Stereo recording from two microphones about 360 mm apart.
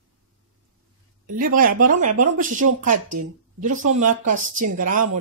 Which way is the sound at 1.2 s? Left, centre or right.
Right.